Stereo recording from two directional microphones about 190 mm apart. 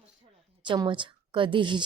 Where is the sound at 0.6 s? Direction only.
25° right (ahead or behind).